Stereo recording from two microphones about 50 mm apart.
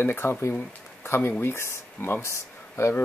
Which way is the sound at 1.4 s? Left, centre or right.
Left.